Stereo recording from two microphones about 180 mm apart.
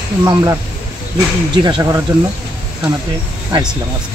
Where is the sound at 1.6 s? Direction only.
15° right (ahead or behind).